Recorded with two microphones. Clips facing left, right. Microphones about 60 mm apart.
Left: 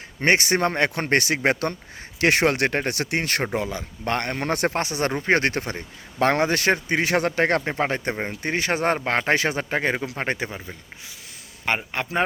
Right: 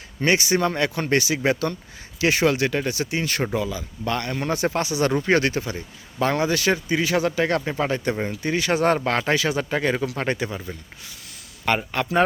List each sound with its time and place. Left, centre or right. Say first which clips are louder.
0.2 s speech: even; left
9.3 s speech: even; left
11.6 s speech: right 3 dB; left